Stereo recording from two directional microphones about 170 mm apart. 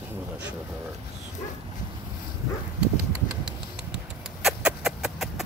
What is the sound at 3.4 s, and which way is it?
Rodents, 5° right (ahead or behind).